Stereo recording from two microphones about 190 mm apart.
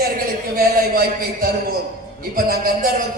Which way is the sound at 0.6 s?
50° right (ahead or behind).